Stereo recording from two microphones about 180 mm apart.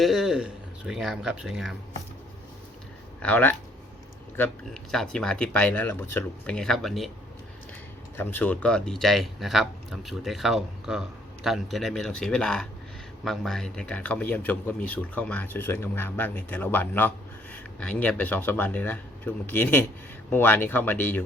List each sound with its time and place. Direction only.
0.0 s speech: centre (ahead or behind)
3.2 s speech: 10° left (ahead or behind)
8.1 s speech: 10° left (ahead or behind)